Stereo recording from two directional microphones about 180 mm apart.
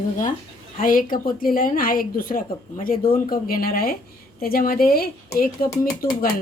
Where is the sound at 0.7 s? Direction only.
50° left (ahead or behind).